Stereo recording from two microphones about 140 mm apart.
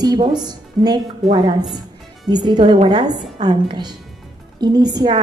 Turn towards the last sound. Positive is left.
turn(degrees=-30)  # may be behind; listen again after turning